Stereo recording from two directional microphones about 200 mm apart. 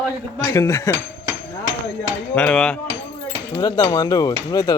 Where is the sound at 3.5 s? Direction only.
20° left (ahead or behind).